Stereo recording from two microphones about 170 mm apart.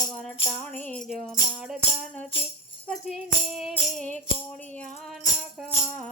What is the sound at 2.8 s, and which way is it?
Music, centre (ahead or behind).